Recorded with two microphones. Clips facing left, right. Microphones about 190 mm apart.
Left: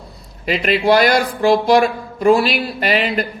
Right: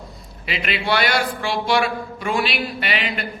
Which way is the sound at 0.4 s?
40° left (ahead or behind).